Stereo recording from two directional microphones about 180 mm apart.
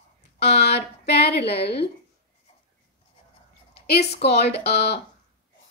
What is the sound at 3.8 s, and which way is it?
A woman's voice, 65° left (ahead or behind).